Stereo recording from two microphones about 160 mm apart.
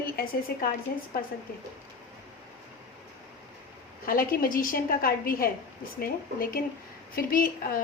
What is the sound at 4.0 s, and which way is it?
A woman's voice, 65° left (ahead or behind).